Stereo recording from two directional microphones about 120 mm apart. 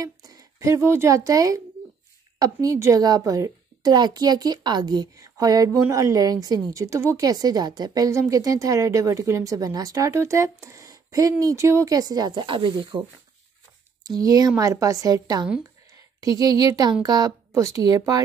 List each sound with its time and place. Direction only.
0.0 s a woman's voice: 30° right (ahead or behind)
14.0 s a woman's voice: 30° right (ahead or behind)